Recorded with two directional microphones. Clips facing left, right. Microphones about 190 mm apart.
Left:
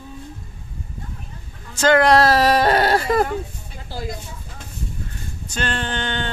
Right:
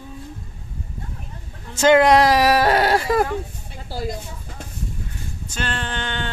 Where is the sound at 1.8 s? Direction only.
20° right (ahead or behind).